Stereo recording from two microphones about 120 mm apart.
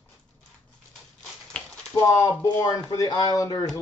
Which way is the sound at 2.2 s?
25° left (ahead or behind).